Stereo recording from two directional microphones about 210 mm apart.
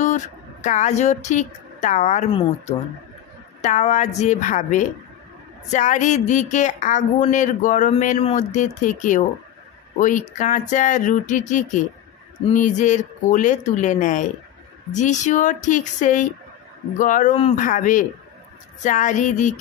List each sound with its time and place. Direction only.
0.0 s a woman's voice: 35° left (ahead or behind)